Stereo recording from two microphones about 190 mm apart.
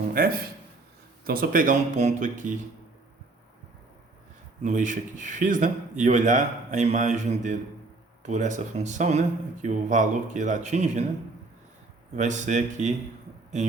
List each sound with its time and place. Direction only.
0.2 s speech: 50° right (ahead or behind)
4.6 s a man's voice: 40° right (ahead or behind)
12.1 s a man's voice: 40° right (ahead or behind)